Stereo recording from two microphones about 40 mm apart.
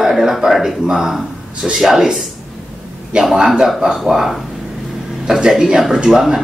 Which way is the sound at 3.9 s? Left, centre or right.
Centre.